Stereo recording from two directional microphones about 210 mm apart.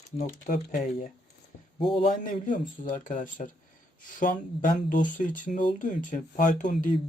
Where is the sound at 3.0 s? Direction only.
40° left (ahead or behind).